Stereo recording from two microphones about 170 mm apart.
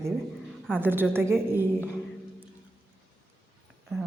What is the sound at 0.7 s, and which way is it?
Speech, 10° right (ahead or behind).